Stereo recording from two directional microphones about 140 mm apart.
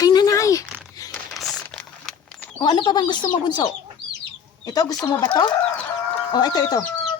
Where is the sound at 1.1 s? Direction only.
Centre (ahead or behind).